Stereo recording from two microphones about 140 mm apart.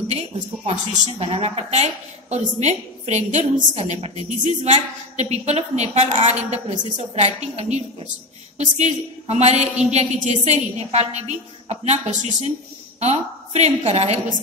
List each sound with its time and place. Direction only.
0.9 s a woman's voice: 50° right (ahead or behind)
7.0 s a woman's voice: 50° right (ahead or behind)
13.0 s a woman's voice: 50° right (ahead or behind)